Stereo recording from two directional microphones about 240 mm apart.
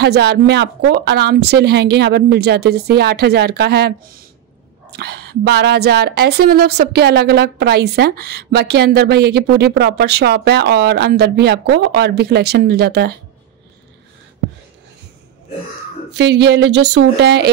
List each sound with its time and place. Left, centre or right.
0.0 s a woman's voice: right
16.1 s a woman's voice: right